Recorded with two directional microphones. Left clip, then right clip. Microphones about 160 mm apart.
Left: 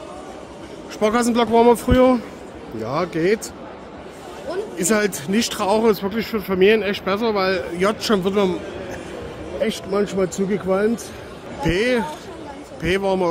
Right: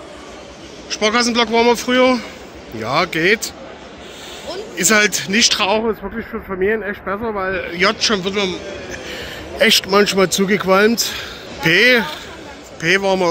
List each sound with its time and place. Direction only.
0.9 s speech: 25° left (ahead or behind)
2.8 s speech: 5° left (ahead or behind)
4.7 s speech: 10° left (ahead or behind)
5.6 s speech: 25° left (ahead or behind)
6.6 s speech: 90° left
6.9 s speech: 20° left (ahead or behind)
8.0 s a man's voice: 30° left (ahead or behind)
9.6 s speech: 15° right (ahead or behind)
11.6 s speech: centre (ahead or behind)